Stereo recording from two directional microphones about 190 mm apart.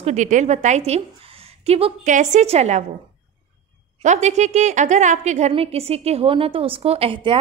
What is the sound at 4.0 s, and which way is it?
A woman's voice, 35° right (ahead or behind).